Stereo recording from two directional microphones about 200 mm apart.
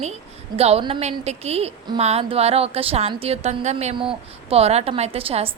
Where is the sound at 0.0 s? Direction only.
30° right (ahead or behind).